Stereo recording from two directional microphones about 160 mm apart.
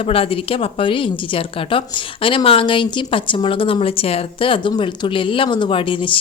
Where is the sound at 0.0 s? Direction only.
35° left (ahead or behind).